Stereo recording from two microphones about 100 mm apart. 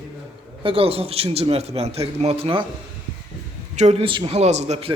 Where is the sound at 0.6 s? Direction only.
70° right (ahead or behind).